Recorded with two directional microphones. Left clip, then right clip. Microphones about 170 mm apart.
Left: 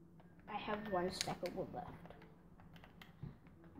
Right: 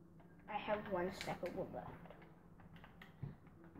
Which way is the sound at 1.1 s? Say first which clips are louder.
Left 2 dB; 60° left (ahead or behind).